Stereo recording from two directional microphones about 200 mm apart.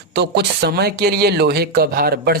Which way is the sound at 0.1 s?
55° right (ahead or behind).